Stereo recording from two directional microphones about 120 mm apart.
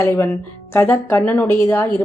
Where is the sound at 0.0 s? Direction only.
20° left (ahead or behind).